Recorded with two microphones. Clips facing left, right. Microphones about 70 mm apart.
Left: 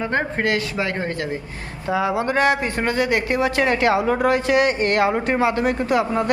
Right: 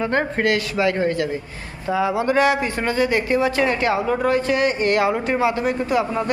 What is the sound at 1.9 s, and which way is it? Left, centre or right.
Speech, left.